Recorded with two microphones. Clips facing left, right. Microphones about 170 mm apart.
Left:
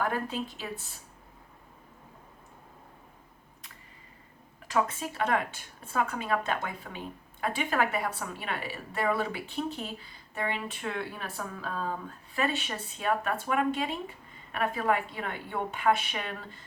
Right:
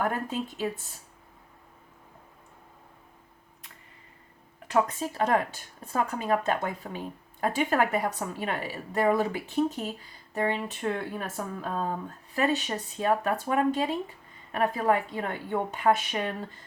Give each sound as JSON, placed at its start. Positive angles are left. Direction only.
{"t": 0.0, "sound": "speech", "side_deg": -45}
{"t": 4.9, "sound": "a woman's voice", "side_deg": -40}